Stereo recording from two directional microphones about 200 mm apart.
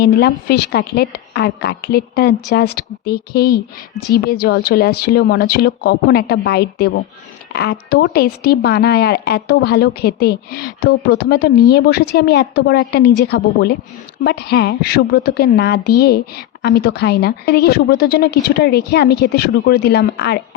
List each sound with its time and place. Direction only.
0.0 s a woman's voice: 50° left (ahead or behind)